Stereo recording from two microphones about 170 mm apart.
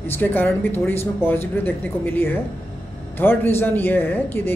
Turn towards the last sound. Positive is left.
turn(degrees=10)  # may be behind; listen again after turning